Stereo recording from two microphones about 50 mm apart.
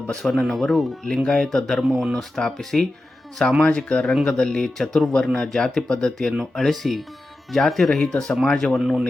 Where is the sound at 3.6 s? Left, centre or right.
Left.